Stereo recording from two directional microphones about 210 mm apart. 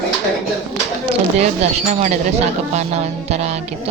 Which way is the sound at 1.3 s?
30° right (ahead or behind).